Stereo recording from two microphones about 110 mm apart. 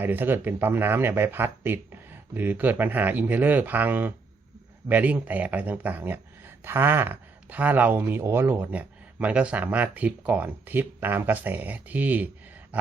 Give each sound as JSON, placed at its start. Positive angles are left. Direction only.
{"t": 0.0, "sound": "speech", "side_deg": -20}